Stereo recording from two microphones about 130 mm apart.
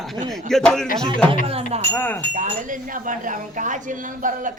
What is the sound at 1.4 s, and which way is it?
Speech, 50° right (ahead or behind).